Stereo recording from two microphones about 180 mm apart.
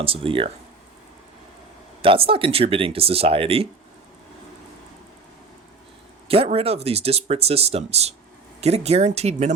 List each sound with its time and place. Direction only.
0.0 s speech: 30° right (ahead or behind)
2.0 s speech: 30° right (ahead or behind)
6.2 s speech: 30° right (ahead or behind)